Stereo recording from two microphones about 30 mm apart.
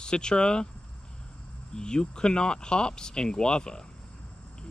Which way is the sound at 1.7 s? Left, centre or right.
Left.